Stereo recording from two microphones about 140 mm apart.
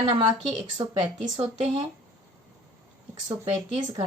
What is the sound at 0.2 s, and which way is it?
Speech, 50° right (ahead or behind).